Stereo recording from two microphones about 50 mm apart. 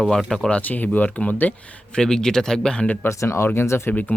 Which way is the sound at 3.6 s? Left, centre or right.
Left.